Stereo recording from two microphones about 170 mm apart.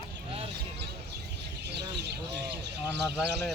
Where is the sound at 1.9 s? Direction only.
75° right (ahead or behind).